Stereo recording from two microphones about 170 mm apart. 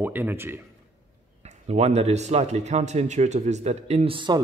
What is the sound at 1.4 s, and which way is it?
Speech, 40° right (ahead or behind).